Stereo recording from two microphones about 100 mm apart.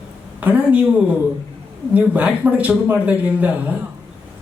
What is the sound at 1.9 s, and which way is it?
Speech, 15° right (ahead or behind).